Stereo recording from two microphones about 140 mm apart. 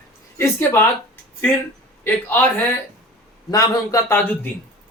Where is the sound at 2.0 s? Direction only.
15° left (ahead or behind).